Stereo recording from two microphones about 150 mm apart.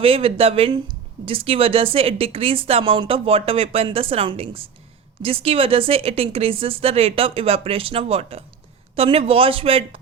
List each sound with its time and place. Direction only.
0.0 s speech: 40° right (ahead or behind)